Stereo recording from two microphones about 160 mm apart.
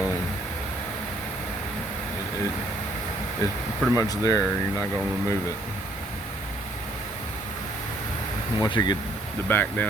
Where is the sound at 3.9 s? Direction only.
20° left (ahead or behind).